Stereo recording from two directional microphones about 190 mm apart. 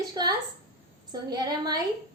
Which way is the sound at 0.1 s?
20° right (ahead or behind).